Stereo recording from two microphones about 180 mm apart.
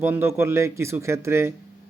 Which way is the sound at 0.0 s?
15° right (ahead or behind).